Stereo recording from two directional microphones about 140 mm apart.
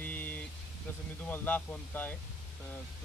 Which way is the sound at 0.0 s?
10° left (ahead or behind).